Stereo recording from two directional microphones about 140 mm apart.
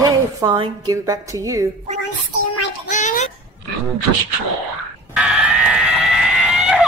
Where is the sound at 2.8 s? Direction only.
60° left (ahead or behind).